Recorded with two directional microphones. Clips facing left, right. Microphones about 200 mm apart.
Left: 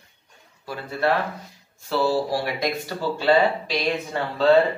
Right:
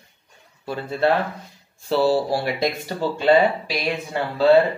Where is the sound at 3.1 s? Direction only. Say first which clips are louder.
Right 2 dB; 15° right (ahead or behind).